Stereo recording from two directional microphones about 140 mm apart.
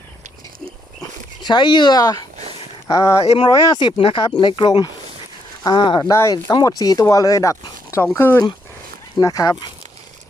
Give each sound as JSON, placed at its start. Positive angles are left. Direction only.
{"t": 1.4, "sound": "speech", "side_deg": 30}
{"t": 3.3, "sound": "speech", "side_deg": 30}
{"t": 6.0, "sound": "speech", "side_deg": 20}